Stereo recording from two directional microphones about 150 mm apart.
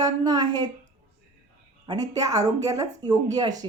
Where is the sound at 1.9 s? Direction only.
25° right (ahead or behind).